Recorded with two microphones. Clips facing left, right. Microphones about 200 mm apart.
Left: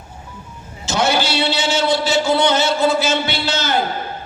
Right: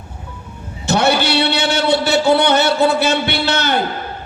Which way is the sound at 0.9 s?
60° right (ahead or behind).